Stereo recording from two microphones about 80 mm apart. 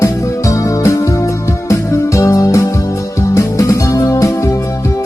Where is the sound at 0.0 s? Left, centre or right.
Left.